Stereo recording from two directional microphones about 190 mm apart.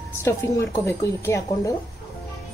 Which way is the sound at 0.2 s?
15° left (ahead or behind).